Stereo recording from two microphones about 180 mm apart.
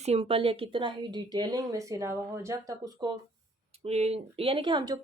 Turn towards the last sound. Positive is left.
turn(degrees=-25)  # may be behind; listen again after turning